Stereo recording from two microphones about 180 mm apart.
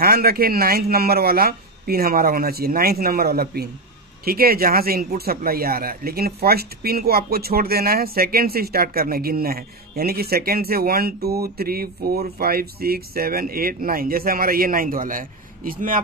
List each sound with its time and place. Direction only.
0.0 s speech: 55° right (ahead or behind)